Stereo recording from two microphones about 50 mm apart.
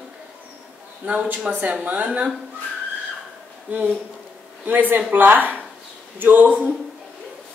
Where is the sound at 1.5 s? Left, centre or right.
Centre.